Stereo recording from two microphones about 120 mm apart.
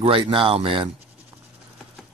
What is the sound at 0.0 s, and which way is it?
Speech, 50° right (ahead or behind).